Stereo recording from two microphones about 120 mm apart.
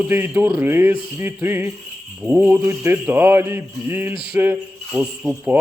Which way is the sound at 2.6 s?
20° right (ahead or behind).